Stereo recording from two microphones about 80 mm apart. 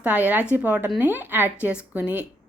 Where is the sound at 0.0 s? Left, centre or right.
Centre.